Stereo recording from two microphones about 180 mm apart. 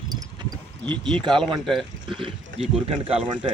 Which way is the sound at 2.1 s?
30° right (ahead or behind).